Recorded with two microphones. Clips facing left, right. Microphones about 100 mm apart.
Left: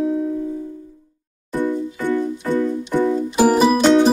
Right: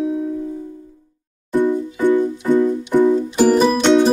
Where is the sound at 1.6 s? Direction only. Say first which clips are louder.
Right 4 dB; 20° right (ahead or behind).